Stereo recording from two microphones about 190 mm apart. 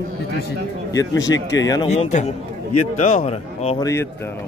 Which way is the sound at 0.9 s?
20° left (ahead or behind).